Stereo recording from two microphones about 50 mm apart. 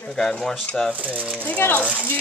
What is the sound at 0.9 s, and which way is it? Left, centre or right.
Speech, right.